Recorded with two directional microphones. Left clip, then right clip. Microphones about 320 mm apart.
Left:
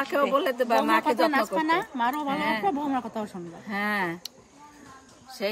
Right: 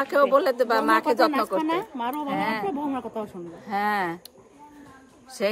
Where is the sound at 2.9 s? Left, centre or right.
Left.